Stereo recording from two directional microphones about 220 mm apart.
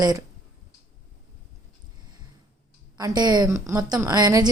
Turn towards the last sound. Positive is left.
turn(degrees=-20)  # may be behind; listen again after turning